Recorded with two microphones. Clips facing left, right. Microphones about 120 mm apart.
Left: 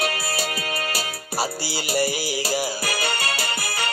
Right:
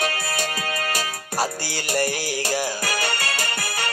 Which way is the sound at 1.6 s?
10° left (ahead or behind).